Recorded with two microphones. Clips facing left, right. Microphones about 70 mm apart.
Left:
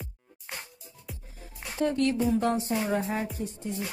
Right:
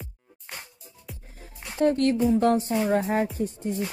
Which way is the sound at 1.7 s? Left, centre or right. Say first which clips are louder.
Right 4 dB; right.